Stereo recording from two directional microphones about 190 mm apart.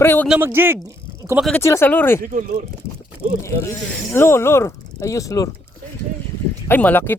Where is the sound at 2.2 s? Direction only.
45° right (ahead or behind).